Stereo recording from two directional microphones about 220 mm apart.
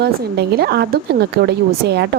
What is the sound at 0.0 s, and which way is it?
Speech, 45° right (ahead or behind).